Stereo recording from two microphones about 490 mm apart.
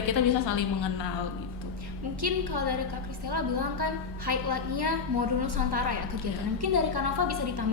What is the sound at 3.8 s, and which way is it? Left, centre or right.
A woman's voice, right.